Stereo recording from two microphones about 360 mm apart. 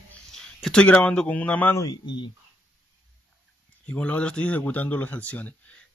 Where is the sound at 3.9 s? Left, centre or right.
Centre.